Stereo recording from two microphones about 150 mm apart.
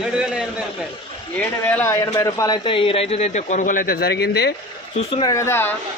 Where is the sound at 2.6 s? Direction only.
35° left (ahead or behind); by 4.5 s 90° left.